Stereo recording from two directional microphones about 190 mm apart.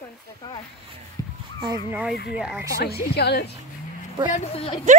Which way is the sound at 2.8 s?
55° left (ahead or behind).